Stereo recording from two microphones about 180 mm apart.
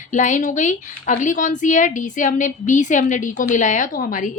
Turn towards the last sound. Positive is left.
turn(degrees=50)  # may be behind; listen again after turning